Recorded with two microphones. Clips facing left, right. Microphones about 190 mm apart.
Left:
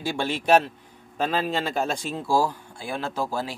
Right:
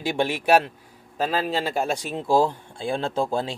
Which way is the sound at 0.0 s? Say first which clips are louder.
Right 3 dB; 15° right (ahead or behind).